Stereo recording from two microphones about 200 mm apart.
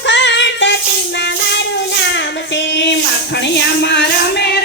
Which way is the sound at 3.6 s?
60° left (ahead or behind).